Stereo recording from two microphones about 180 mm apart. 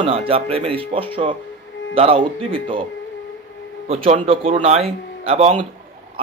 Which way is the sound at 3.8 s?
30° right (ahead or behind).